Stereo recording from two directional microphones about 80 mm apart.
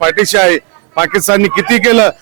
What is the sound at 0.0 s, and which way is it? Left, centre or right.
A man's voice, right.